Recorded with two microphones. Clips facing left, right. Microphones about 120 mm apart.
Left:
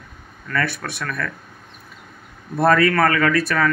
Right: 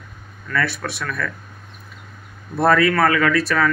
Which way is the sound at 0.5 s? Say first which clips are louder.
Right 1 dB; 40° left (ahead or behind).